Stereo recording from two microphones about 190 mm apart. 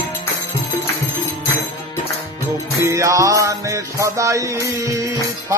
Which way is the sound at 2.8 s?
15° right (ahead or behind).